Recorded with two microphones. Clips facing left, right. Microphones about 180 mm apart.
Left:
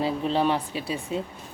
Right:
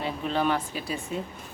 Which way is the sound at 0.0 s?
30° left (ahead or behind).